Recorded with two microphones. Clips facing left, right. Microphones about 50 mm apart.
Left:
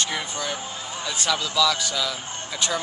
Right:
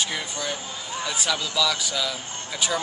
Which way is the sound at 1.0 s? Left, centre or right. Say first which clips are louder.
Left 1 dB; centre.